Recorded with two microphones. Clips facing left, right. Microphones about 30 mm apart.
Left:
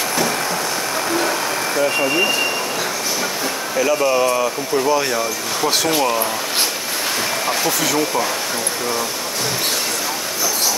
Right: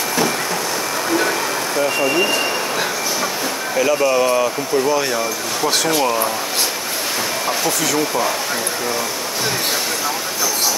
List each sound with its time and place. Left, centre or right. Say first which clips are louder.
1.8 s speech: even; centre
3.7 s speech: right 1 dB; centre
7.4 s speech: even; centre